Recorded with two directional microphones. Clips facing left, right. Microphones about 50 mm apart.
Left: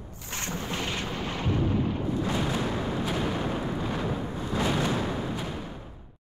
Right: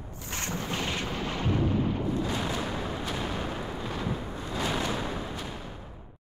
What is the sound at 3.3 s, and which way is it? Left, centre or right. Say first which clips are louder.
Artillery fire: left 4 dB; centre.